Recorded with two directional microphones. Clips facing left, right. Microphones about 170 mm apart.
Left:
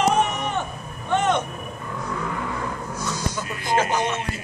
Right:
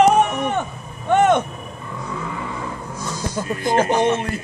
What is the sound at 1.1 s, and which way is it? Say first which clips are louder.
Vehicle: right 6 dB; 55° right (ahead or behind).